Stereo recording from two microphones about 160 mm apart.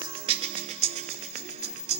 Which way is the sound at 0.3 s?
35° right (ahead or behind).